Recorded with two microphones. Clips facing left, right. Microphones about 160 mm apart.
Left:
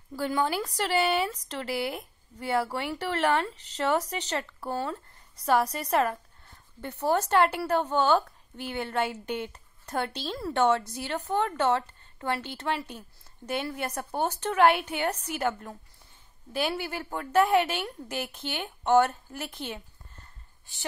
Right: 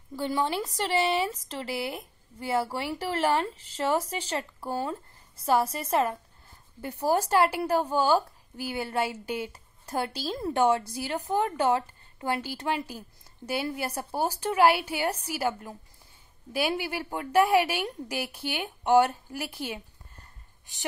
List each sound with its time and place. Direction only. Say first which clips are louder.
0.3 s speech: even; centre (ahead or behind)
3.2 s speech: even; 30° right (ahead or behind)
4.2 s a woman's voice: even; 10° right (ahead or behind)